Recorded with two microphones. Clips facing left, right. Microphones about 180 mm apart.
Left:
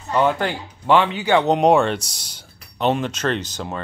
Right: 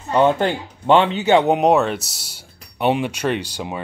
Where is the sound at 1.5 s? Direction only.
Centre (ahead or behind).